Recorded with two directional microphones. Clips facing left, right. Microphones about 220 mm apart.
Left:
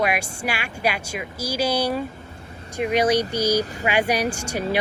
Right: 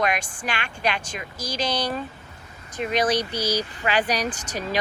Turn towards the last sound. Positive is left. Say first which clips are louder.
# left 4 dB
turn(degrees=10)  # may be behind; listen again after turning